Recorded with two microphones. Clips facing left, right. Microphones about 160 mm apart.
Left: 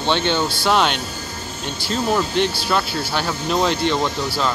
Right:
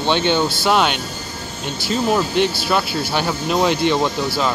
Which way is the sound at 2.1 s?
10° right (ahead or behind).